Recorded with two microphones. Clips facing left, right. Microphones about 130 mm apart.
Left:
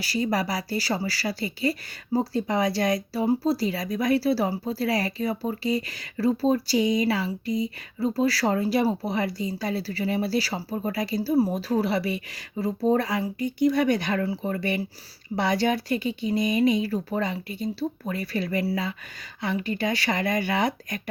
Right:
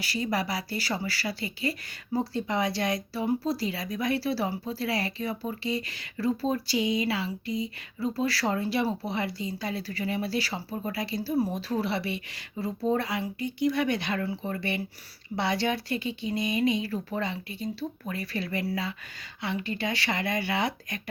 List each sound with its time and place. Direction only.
0.0 s speech: 40° left (ahead or behind)